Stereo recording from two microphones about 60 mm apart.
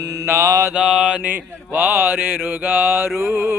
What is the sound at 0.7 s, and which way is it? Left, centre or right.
Mantra, centre.